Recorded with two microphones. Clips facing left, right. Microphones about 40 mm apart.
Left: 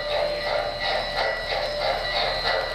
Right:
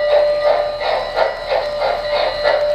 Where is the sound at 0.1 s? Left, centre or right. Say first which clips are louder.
Right 10 dB; right.